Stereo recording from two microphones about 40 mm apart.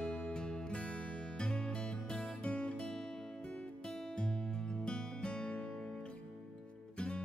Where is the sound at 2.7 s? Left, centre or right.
Centre.